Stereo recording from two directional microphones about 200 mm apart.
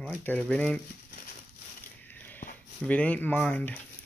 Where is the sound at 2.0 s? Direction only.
10° left (ahead or behind).